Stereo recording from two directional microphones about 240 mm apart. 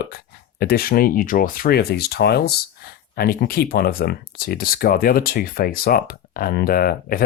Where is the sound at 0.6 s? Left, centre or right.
Left.